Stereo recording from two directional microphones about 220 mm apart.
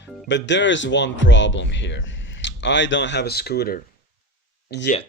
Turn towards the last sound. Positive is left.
turn(degrees=50)  # may be behind; listen again after turning